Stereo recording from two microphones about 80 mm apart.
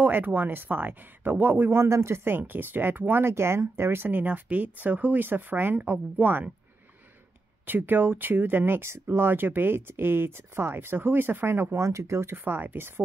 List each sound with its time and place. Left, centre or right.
0.0 s speech: right
7.6 s speech: right